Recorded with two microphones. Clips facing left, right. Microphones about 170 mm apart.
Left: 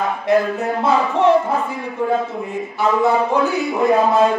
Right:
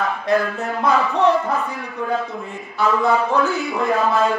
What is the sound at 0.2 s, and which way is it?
Speech, 20° left (ahead or behind).